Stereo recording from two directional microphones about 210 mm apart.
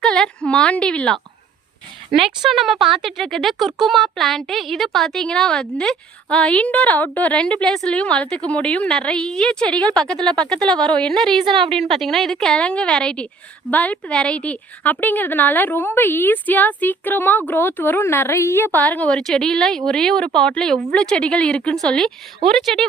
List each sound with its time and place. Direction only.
0.0 s a woman's voice: 5° left (ahead or behind)
2.4 s speech: centre (ahead or behind)
11.4 s a woman's voice: 25° right (ahead or behind)
11.9 s a woman's voice: centre (ahead or behind)